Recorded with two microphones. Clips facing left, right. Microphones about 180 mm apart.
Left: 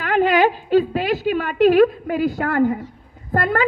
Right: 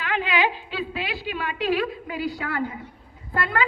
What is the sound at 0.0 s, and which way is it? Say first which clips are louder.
A woman's voice: left 8 dB; 45° left (ahead or behind).